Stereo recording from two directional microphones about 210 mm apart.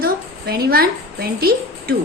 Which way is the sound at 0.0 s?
50° right (ahead or behind).